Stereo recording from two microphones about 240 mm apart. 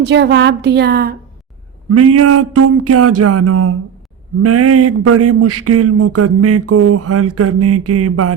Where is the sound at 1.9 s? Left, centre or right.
Right.